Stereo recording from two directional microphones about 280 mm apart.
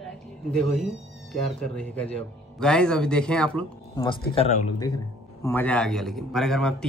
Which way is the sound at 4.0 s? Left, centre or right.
Centre.